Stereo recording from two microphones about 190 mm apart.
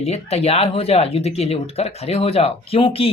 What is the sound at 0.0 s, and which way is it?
Speech, 35° left (ahead or behind).